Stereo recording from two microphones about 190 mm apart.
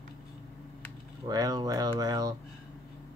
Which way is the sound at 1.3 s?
20° right (ahead or behind).